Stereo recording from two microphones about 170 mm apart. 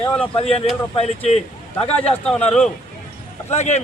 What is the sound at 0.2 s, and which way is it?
A man's voice, 35° left (ahead or behind).